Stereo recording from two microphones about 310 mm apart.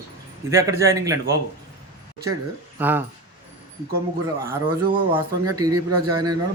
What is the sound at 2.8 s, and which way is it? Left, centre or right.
Speech, centre.